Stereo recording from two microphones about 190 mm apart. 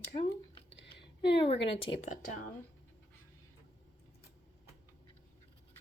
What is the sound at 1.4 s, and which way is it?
Speech, 30° left (ahead or behind).